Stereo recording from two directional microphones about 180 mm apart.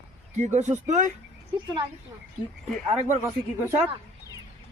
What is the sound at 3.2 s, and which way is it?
Speech, 15° right (ahead or behind).